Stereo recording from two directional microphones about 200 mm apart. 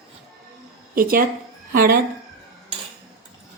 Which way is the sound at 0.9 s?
45° right (ahead or behind).